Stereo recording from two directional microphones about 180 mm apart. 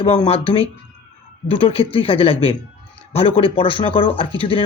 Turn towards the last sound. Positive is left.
turn(degrees=30)  # may be behind; listen again after turning